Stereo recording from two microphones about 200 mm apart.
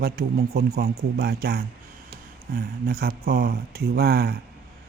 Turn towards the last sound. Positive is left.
turn(degrees=-50)  # may be behind; listen again after turning